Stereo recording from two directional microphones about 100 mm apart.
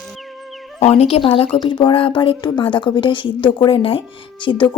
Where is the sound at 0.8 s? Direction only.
90° left; by 1.5 s 65° left (ahead or behind).